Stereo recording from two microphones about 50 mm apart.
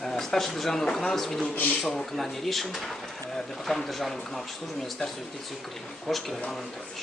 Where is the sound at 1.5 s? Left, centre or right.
Left.